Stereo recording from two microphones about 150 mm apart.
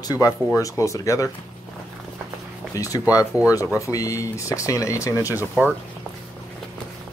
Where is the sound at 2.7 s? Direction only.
20° left (ahead or behind).